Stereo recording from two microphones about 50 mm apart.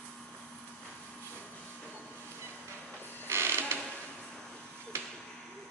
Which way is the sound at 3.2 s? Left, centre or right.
Right.